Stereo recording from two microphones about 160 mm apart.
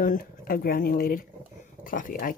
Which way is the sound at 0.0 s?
60° left (ahead or behind).